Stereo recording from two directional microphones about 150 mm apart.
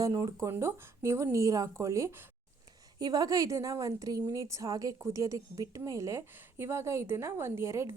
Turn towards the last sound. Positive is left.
turn(degrees=-20)  # may be behind; listen again after turning